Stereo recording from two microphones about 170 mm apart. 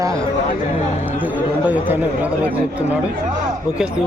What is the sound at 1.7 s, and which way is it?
Speech, 10° right (ahead or behind).